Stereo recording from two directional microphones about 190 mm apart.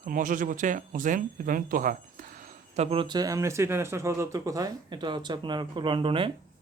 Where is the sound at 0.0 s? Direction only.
45° right (ahead or behind).